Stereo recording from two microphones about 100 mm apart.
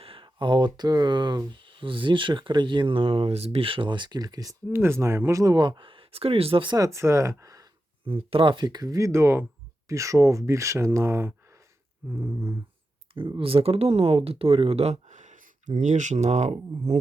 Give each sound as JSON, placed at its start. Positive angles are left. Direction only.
{"t": 0.0, "sound": "speech", "side_deg": -65}
{"t": 4.7, "sound": "speech", "side_deg": -25}
{"t": 5.6, "sound": "speech", "side_deg": -55}
{"t": 6.7, "sound": "speech", "side_deg": -35}
{"t": 8.0, "sound": "speech", "side_deg": -65}
{"t": 13.1, "sound": "speech", "side_deg": -55}
{"t": 16.2, "sound": "speech", "side_deg": -90}